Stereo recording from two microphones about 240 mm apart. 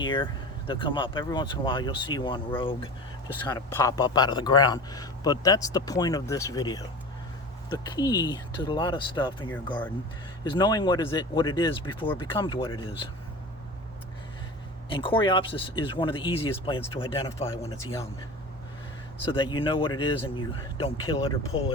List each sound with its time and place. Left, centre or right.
0.0 s a man's voice: centre
14.8 s speech: centre
19.2 s speech: left